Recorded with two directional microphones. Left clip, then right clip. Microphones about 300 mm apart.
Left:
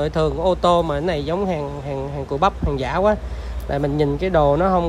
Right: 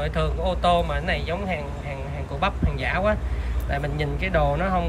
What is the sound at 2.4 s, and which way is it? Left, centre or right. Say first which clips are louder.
Speech: left 5 dB; centre.